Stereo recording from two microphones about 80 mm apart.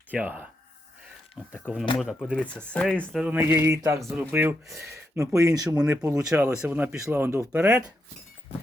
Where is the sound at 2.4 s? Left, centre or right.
Centre.